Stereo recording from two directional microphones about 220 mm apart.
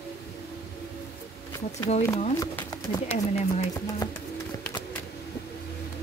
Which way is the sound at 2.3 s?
10° left (ahead or behind).